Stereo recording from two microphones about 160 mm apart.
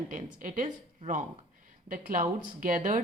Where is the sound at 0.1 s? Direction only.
55° right (ahead or behind).